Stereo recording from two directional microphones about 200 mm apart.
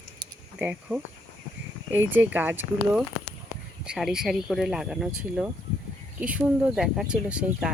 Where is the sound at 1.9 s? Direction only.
10° right (ahead or behind).